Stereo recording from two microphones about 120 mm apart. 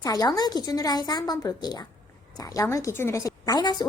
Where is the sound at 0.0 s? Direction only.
30° left (ahead or behind).